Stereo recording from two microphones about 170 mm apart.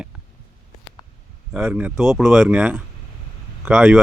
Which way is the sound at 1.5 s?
10° right (ahead or behind).